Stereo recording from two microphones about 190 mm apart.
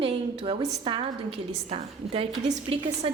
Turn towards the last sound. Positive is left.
turn(degrees=-30)  # may be behind; listen again after turning